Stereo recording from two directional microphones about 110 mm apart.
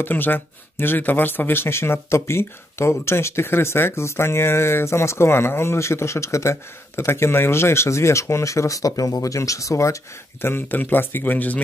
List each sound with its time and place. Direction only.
0.0 s speech: 20° left (ahead or behind)